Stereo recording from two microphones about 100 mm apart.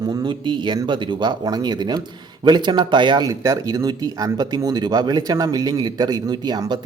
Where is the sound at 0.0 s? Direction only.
45° right (ahead or behind).